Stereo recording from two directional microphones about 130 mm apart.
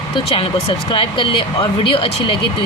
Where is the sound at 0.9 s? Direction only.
40° left (ahead or behind).